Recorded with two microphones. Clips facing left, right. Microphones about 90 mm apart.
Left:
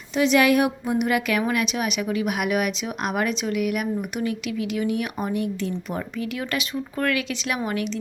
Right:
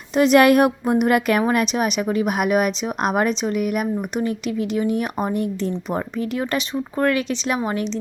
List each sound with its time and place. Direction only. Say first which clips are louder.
0.2 s a woman's voice: right 5 dB; 50° right (ahead or behind); by 7.9 s 30° right (ahead or behind)